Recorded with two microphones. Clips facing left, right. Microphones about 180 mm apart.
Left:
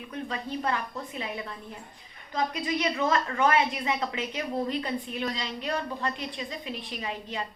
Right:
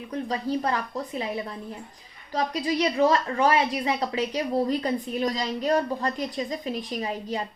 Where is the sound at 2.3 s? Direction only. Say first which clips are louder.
Right 3 dB; 35° right (ahead or behind).